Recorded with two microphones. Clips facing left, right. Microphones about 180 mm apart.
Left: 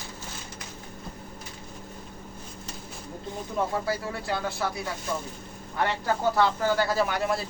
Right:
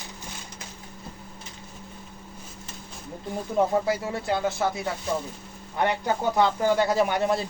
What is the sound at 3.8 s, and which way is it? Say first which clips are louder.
Speech: right 4 dB; 20° right (ahead or behind).